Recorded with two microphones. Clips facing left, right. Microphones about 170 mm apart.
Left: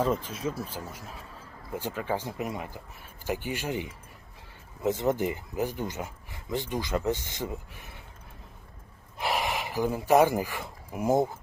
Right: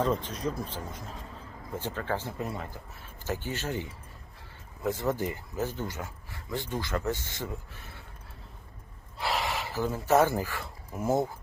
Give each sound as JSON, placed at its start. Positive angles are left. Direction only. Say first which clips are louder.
{"t": 0.0, "sound": "speech", "louder": "left 1 dB", "side_deg": 10}
{"t": 9.1, "sound": "speech", "louder": "left 2 dB", "side_deg": 20}